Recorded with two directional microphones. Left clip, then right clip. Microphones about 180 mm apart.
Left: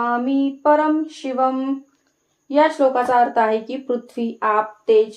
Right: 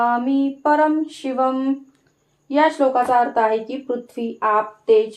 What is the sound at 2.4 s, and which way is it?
Speech, 25° right (ahead or behind).